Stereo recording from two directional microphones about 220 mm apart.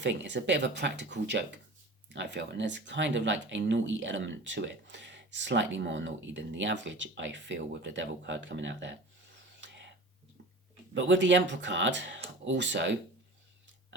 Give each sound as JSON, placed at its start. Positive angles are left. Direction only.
{"t": 0.0, "sound": "speech", "side_deg": -55}
{"t": 9.6, "sound": "a sound", "side_deg": -55}
{"t": 10.9, "sound": "speech", "side_deg": -55}